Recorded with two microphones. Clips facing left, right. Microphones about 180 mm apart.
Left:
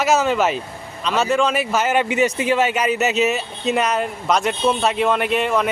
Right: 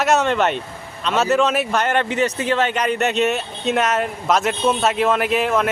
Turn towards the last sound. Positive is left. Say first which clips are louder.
# right 1 dB
turn(degrees=0)  # may be behind; listen again after turning